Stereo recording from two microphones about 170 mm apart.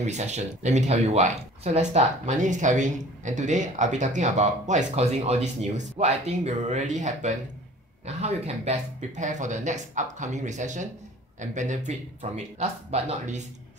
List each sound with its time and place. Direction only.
0.0 s speech: 40° right (ahead or behind)